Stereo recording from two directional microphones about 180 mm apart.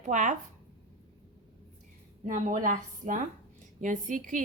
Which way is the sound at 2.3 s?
45° right (ahead or behind).